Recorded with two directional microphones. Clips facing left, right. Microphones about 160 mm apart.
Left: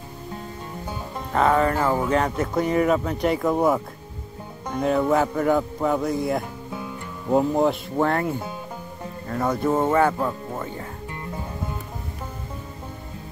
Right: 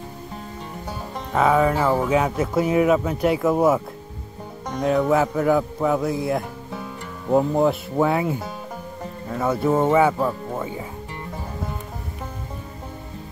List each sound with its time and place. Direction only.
1.3 s speech: 5° right (ahead or behind)